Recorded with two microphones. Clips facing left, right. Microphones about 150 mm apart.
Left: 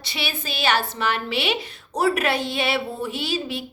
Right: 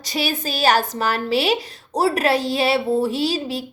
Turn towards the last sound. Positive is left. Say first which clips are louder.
# right 5 dB
turn(degrees=-35)  # may be behind; listen again after turning